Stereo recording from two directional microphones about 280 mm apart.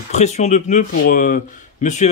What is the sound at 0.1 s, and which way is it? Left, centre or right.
Speech, left.